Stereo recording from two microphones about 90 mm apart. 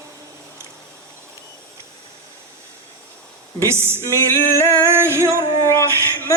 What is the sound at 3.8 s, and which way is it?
Music, 30° right (ahead or behind).